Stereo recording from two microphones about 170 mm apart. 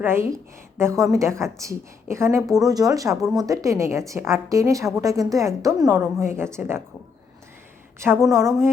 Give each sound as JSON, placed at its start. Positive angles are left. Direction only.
{"t": 0.0, "sound": "a woman's voice", "side_deg": -15}
{"t": 7.9, "sound": "a woman's voice", "side_deg": -15}